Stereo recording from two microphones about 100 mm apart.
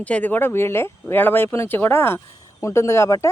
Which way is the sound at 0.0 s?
15° left (ahead or behind).